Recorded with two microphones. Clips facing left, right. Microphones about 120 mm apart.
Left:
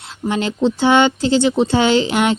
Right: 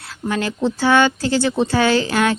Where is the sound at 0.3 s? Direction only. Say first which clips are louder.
Left 3 dB; 20° left (ahead or behind).